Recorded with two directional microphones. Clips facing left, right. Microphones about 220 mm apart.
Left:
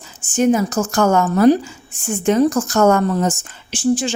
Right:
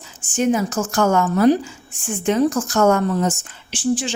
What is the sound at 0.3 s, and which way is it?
A woman's voice, 40° left (ahead or behind).